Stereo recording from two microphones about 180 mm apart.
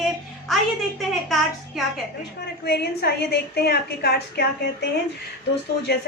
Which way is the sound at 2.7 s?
65° left (ahead or behind).